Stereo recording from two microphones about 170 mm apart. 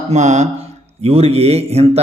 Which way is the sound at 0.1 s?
45° right (ahead or behind).